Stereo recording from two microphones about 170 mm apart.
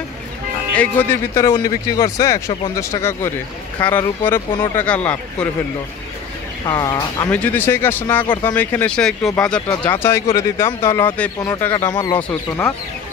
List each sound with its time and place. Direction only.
0.7 s speech: 15° left (ahead or behind)
6.6 s speech: 25° left (ahead or behind)
7.2 s speech: 10° left (ahead or behind)
12.1 s speech: 15° left (ahead or behind)